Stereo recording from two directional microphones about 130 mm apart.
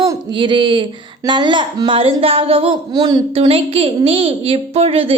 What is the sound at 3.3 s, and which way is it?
A woman's voice, 45° right (ahead or behind).